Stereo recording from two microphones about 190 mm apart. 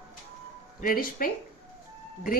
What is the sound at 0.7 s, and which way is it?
Speech, 45° left (ahead or behind).